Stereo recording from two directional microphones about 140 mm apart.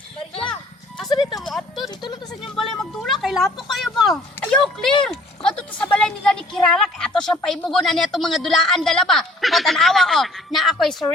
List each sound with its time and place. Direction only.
1.1 s speech: 30° left (ahead or behind)
1.4 s a woman's voice: centre (ahead or behind)